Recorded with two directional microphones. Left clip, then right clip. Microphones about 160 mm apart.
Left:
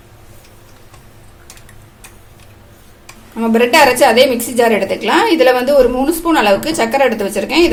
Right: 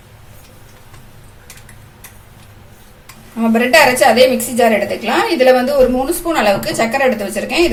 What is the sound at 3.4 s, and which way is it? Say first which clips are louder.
A woman's voice: left 1 dB; 50° left (ahead or behind).